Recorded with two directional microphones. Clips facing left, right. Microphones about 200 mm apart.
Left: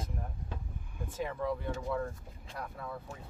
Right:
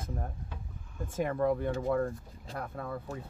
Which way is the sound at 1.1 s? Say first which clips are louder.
Right 6 dB; 50° right (ahead or behind).